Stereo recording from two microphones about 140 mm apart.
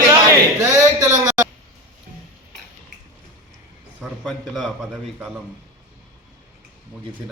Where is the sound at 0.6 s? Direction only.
20° right (ahead or behind).